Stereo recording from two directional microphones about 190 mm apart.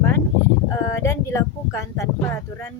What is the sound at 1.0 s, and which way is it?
Speech, 15° left (ahead or behind).